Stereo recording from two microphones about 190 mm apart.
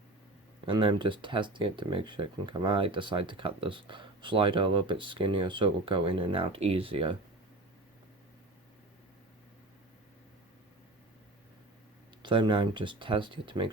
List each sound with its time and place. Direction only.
0.6 s speech: 25° right (ahead or behind)
12.2 s speech: 25° right (ahead or behind)